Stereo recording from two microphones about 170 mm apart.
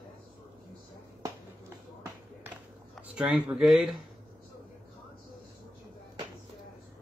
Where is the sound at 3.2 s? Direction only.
5° right (ahead or behind).